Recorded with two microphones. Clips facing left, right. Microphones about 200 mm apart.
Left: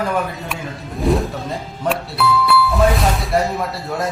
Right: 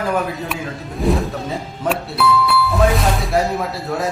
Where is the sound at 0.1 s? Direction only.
Centre (ahead or behind).